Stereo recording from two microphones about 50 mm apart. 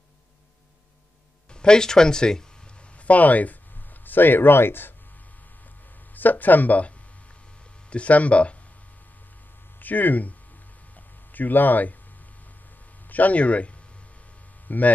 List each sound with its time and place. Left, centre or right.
1.5 s speech: centre
3.0 s speech: left
6.1 s speech: left
7.9 s speech: left
9.8 s speech: left
11.3 s speech: left
13.1 s speech: left
14.7 s speech: left